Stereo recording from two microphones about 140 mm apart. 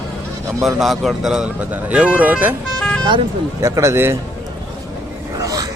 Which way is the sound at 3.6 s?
20° right (ahead or behind).